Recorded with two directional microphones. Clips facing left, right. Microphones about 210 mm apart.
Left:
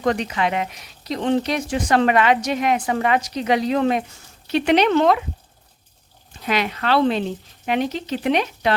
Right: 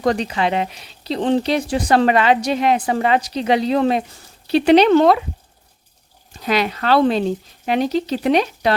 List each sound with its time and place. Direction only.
0.0 s speech: 35° right (ahead or behind)
6.5 s speech: 35° right (ahead or behind)